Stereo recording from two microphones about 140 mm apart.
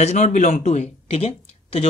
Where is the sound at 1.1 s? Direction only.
45° left (ahead or behind).